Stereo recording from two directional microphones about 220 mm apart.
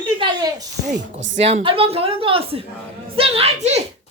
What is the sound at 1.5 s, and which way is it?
A woman's voice, 25° right (ahead or behind).